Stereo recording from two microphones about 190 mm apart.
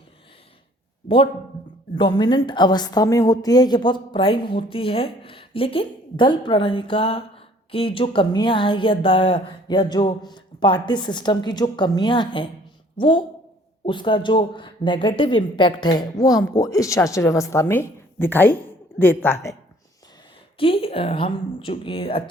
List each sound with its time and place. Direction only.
1.0 s a man's voice: 30° left (ahead or behind)
20.6 s a woman's voice: 30° left (ahead or behind)